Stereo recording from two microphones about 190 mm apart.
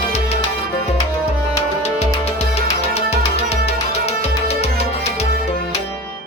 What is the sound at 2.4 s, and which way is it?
Music, 35° left (ahead or behind).